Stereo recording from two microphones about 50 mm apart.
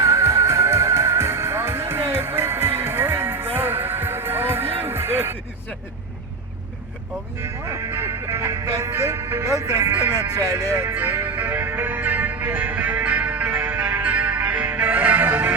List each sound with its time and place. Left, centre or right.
0.0 s music: right
7.4 s speech: right
10.9 s music: right